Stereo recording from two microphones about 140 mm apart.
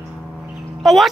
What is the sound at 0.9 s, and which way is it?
Speech, centre (ahead or behind).